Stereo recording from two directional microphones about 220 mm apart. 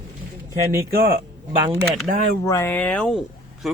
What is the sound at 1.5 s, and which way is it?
Speech, 10° right (ahead or behind).